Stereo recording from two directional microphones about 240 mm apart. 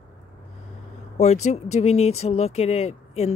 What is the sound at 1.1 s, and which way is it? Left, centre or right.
Speech, left.